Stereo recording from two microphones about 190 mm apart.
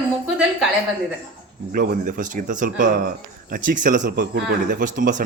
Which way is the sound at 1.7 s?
45° right (ahead or behind).